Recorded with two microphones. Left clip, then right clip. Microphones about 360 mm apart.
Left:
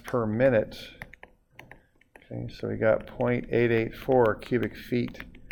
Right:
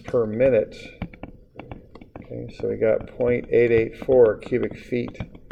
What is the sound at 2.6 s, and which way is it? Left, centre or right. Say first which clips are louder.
Speech: right 4 dB; left.